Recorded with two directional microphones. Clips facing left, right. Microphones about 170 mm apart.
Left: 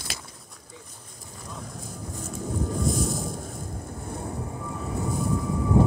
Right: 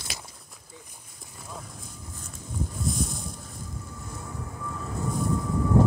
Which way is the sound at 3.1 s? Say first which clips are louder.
Left 7 dB; 50° left (ahead or behind).